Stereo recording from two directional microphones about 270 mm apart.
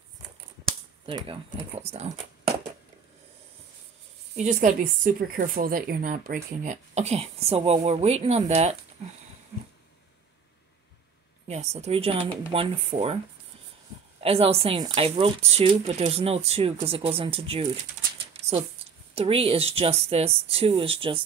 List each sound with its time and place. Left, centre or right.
1.0 s speech: centre
4.4 s speech: right
11.4 s speech: right
14.2 s speech: right
18.4 s a sound: right
19.1 s speech: right